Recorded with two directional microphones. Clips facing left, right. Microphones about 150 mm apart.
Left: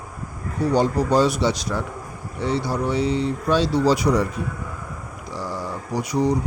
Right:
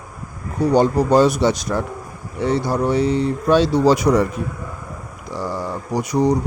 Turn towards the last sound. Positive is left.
turn(degrees=-45)  # may be behind; listen again after turning